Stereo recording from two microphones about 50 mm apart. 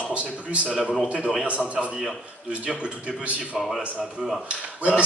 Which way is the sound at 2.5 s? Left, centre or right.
Right.